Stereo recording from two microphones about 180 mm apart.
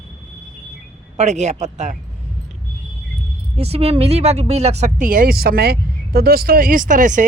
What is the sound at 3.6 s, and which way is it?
Speech, 35° right (ahead or behind).